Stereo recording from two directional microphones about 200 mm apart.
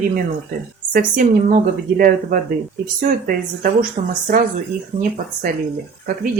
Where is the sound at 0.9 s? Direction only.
40° right (ahead or behind).